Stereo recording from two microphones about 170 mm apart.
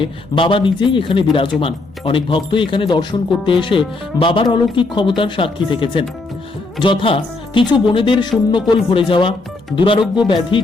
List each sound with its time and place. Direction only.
0.0 s speech: 30° left (ahead or behind)